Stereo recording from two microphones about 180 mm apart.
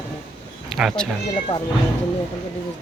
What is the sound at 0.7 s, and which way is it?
Speech, centre (ahead or behind).